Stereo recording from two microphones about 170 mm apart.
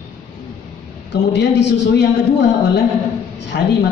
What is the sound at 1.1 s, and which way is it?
Speech, 90° left.